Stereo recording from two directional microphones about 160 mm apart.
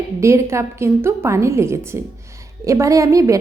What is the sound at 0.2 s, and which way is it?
A woman's voice, 15° right (ahead or behind).